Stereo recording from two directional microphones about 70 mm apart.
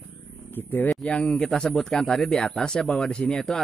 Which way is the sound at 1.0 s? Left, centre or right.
Centre.